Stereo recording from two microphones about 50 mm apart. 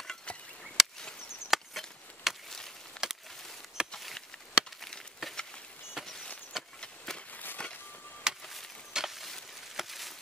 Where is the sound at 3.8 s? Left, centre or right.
Centre.